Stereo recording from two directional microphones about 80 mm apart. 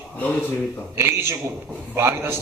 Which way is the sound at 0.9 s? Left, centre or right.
Right.